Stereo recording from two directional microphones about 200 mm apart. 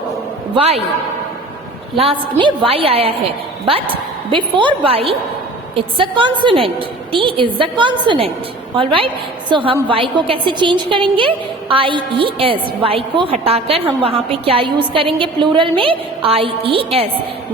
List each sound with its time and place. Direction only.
2.0 s a woman's voice: 25° right (ahead or behind)